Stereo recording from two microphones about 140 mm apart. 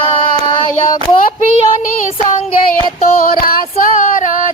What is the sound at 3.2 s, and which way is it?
Female singing, 90° left.